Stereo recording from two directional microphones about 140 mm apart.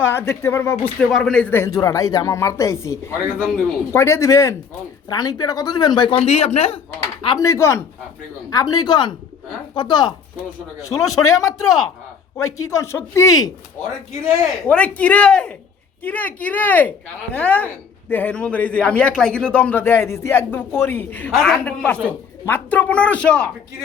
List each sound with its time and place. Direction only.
0.0 s a man's voice: 20° left (ahead or behind)
1.1 s a man's voice: 5° left (ahead or behind)
1.7 s speech: 25° left (ahead or behind); by 6.7 s 50° left (ahead or behind)
7.3 s speech: 20° left (ahead or behind)
14.4 s a man's voice: 10° left (ahead or behind)
21.3 s a man's voice: centre (ahead or behind)